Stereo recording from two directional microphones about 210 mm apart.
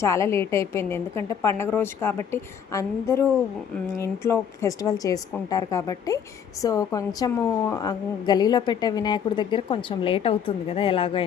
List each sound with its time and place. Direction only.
0.0 s a woman's voice: 15° left (ahead or behind)